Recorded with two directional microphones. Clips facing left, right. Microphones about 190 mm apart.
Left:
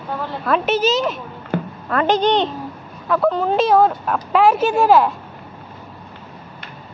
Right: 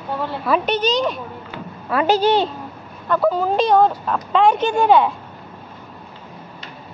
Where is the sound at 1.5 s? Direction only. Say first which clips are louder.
Left 13 dB; 55° left (ahead or behind).